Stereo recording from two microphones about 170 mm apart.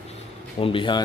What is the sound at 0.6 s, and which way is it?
Speech, 30° left (ahead or behind).